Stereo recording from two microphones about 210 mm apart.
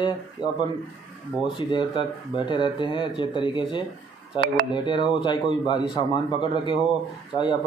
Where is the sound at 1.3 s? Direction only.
5° right (ahead or behind).